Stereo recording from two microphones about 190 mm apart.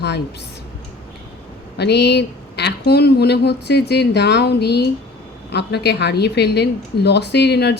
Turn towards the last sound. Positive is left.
turn(degrees=60)  # may be behind; listen again after turning